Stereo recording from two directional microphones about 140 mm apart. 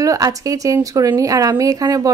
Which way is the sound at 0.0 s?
25° right (ahead or behind).